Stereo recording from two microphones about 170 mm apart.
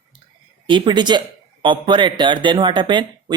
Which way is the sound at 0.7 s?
25° right (ahead or behind).